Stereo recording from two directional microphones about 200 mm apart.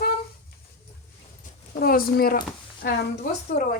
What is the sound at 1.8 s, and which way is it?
A woman's voice, 45° left (ahead or behind).